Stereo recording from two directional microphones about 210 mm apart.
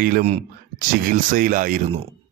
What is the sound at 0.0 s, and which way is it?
Speech, 35° right (ahead or behind).